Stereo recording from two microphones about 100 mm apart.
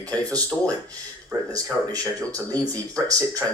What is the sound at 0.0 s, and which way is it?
Speech, 40° right (ahead or behind).